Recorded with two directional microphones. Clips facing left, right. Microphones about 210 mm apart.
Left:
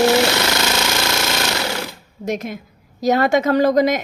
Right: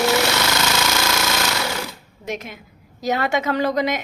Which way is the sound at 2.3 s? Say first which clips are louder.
Left 6 dB; 40° left (ahead or behind).